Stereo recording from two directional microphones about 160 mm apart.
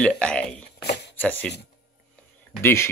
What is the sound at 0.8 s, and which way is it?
Shuffling cards, 90° left.